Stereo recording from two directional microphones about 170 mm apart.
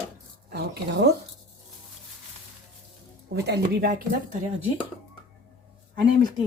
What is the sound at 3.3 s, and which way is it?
Speech, 75° right (ahead or behind).